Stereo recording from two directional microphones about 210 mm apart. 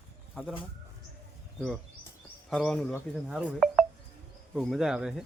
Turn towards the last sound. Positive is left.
turn(degrees=-5)  # may be behind; listen again after turning